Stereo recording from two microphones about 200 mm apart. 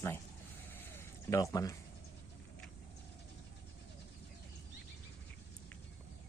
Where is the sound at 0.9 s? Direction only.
15° left (ahead or behind).